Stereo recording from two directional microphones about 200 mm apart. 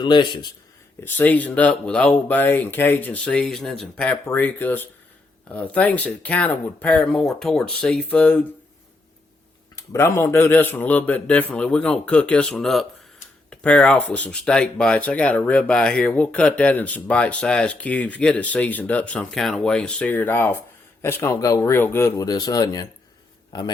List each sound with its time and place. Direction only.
0.0 s a man's voice: 20° left (ahead or behind)
1.0 s speech: 10° left (ahead or behind)
9.7 s a man's voice: 15° left (ahead or behind)